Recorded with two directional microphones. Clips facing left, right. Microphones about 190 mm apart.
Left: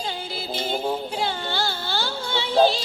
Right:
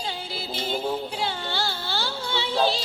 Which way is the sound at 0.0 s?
50° left (ahead or behind).